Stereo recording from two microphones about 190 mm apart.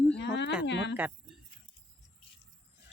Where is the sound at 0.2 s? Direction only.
65° left (ahead or behind).